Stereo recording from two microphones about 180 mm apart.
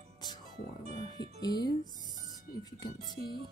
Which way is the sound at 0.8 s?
40° right (ahead or behind).